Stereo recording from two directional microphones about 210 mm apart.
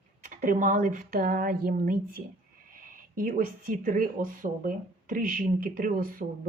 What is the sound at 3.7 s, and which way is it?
Speech, 40° right (ahead or behind).